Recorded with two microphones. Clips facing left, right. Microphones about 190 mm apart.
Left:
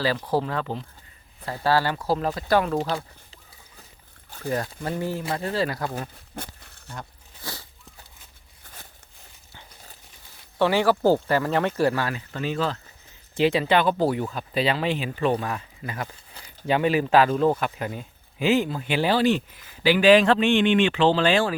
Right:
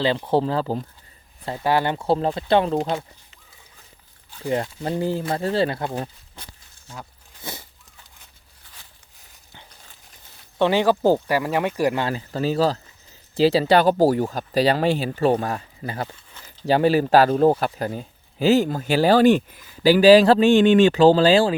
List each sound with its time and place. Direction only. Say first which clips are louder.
0.3 s speech: right 4 dB; 30° right (ahead or behind)
1.5 s speech: right 1 dB; 20° right (ahead or behind)
4.4 s speech: right 3 dB; 25° right (ahead or behind)
6.3 s a sound: left 8 dB; 60° left (ahead or behind)
8.6 s a sound: left 5 dB; 50° left (ahead or behind)
10.6 s speech: right 2 dB; 20° right (ahead or behind)
12.0 s speech: right 5 dB; 35° right (ahead or behind)